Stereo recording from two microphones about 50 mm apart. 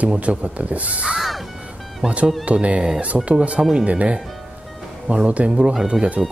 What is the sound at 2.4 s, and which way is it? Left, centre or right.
Speech, right.